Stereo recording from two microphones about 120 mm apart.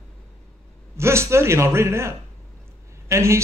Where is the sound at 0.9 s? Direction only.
20° right (ahead or behind).